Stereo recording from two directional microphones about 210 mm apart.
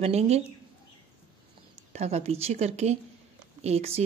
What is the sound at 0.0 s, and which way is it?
Speech, 30° right (ahead or behind).